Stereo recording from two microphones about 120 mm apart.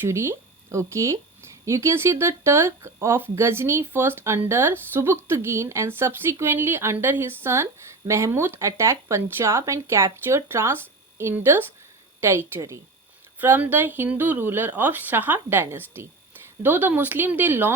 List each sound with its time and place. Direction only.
0.0 s a woman's voice: 20° right (ahead or behind)
13.4 s speech: 15° right (ahead or behind)